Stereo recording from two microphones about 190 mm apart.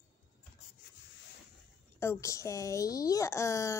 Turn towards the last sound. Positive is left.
turn(degrees=15)  # may be behind; listen again after turning